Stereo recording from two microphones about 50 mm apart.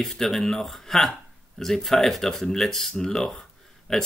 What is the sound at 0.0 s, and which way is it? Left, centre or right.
Speech, centre.